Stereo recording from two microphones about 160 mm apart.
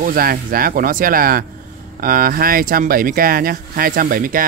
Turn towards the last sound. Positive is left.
turn(degrees=-60)  # may be behind; listen again after turning